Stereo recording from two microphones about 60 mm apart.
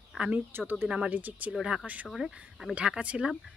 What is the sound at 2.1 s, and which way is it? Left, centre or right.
Speech, centre.